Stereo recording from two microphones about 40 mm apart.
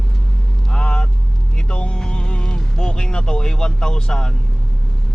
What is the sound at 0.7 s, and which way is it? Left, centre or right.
Speech, left.